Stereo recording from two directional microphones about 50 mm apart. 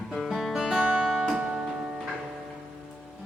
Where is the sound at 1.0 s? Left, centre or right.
Centre.